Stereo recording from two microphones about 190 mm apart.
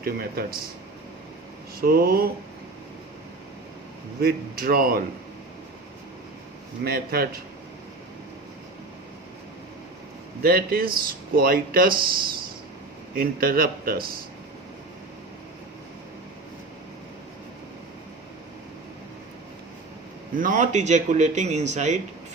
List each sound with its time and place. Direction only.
0.0 s speech: 55° right (ahead or behind)
1.8 s speech: 50° right (ahead or behind)
4.2 s speech: 50° right (ahead or behind)
6.8 s speech: 55° right (ahead or behind)
10.4 s speech: 50° right (ahead or behind)
20.3 s speech: 45° right (ahead or behind)